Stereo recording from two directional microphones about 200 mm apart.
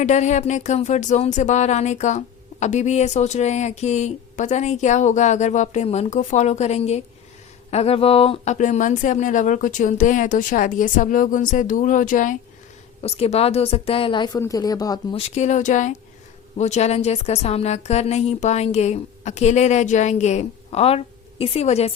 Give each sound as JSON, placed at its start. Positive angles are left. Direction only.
{"t": 0.0, "sound": "speech", "side_deg": 35}
{"t": 13.0, "sound": "a woman's voice", "side_deg": 30}
{"t": 15.4, "sound": "speech", "side_deg": 35}